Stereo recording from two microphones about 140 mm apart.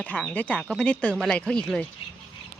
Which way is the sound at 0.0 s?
10° left (ahead or behind).